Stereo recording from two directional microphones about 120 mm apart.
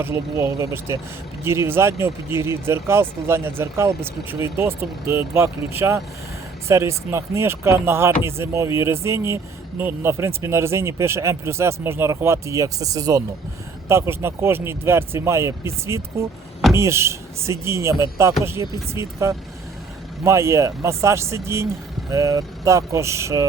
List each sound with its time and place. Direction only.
0.0 s speech: 20° right (ahead or behind)